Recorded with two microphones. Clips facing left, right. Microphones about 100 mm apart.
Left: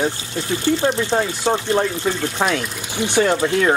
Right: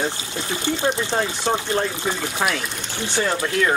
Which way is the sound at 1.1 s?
15° left (ahead or behind).